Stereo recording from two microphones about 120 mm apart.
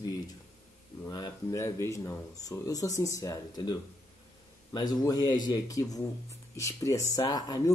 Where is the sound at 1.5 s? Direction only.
25° left (ahead or behind).